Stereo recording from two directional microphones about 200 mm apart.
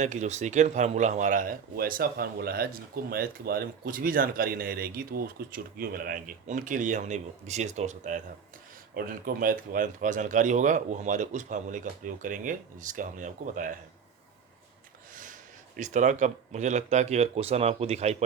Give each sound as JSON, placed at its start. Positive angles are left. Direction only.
{"t": 0.0, "sound": "speech", "side_deg": -35}
{"t": 15.1, "sound": "speech", "side_deg": -40}